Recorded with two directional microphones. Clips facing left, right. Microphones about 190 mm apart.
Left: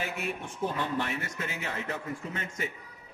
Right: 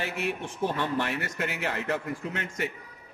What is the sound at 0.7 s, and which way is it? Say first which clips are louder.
A man's voice: right 3 dB; 70° right (ahead or behind).